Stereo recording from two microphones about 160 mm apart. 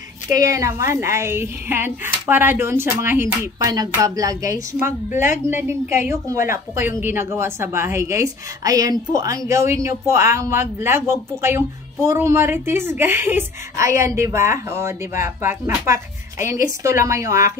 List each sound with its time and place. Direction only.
0.5 s a woman's voice: 20° right (ahead or behind)